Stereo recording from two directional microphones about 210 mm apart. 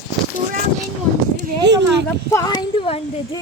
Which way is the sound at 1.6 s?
55° right (ahead or behind).